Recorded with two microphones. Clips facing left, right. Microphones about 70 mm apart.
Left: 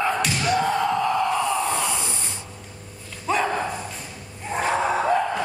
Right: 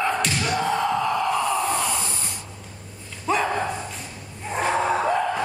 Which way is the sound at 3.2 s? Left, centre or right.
Centre.